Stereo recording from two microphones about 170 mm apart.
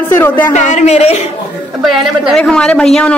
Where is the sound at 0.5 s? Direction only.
45° left (ahead or behind).